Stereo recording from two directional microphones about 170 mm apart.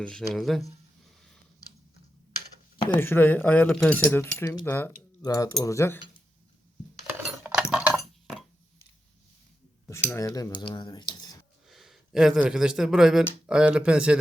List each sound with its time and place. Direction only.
0.0 s speech: 5° left (ahead or behind)
2.9 s speech: 10° left (ahead or behind)
7.3 s a sound: 5° right (ahead or behind)
9.9 s speech: 15° left (ahead or behind)
11.7 s speech: centre (ahead or behind)